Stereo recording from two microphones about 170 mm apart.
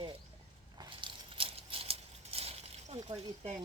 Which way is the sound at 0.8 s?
30° right (ahead or behind).